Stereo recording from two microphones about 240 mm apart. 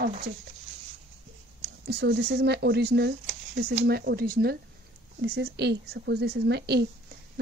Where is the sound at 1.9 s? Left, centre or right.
Right.